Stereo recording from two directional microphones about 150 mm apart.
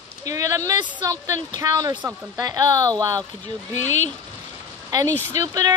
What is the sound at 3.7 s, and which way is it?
Speech, 50° left (ahead or behind).